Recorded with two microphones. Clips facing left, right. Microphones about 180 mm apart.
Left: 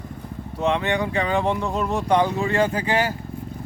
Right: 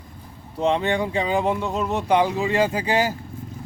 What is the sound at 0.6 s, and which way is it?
Speech, 30° right (ahead or behind).